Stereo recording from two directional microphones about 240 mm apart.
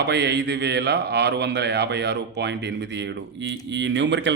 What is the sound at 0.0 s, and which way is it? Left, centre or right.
Speech, right.